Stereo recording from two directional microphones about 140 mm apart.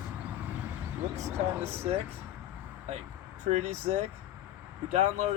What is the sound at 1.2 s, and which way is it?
Speech, 20° right (ahead or behind).